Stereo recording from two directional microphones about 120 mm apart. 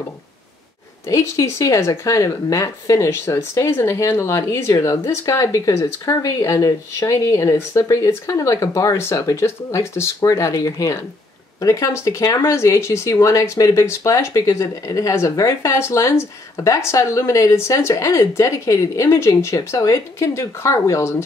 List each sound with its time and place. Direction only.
1.0 s speech: 25° left (ahead or behind)